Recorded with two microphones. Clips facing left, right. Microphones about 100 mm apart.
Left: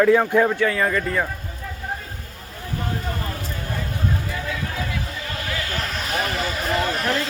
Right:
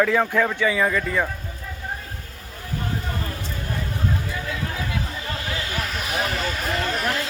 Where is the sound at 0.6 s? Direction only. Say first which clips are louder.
Even; centre (ahead or behind).